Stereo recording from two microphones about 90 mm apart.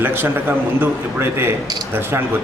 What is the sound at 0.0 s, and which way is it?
Speech, 25° right (ahead or behind).